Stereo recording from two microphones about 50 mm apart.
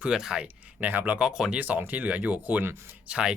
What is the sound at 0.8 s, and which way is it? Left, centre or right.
Speech, right.